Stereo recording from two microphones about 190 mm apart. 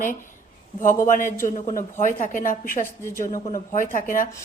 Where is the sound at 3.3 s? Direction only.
45° left (ahead or behind).